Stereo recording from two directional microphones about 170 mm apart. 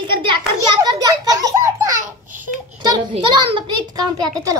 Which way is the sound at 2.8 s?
30° right (ahead or behind).